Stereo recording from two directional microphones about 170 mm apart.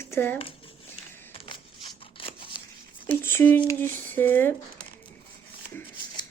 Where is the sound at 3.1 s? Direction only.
10° left (ahead or behind).